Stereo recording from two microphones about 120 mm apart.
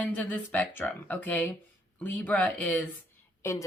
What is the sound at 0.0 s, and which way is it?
Speech, 15° left (ahead or behind).